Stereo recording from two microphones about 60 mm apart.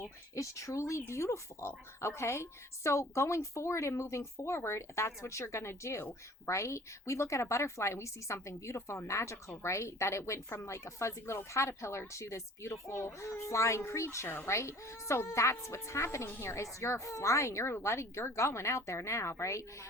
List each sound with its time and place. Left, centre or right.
0.3 s speech: left